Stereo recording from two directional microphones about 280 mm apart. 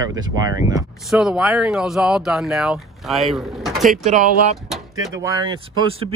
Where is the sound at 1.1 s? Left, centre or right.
Centre.